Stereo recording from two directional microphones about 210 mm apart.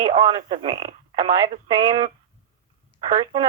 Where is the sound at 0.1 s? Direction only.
20° right (ahead or behind).